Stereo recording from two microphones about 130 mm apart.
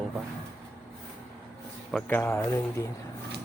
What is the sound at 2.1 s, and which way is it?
Speech, 15° left (ahead or behind).